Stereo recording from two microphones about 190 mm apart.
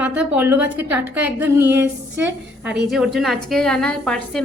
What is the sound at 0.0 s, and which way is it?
A woman's voice, 5° right (ahead or behind).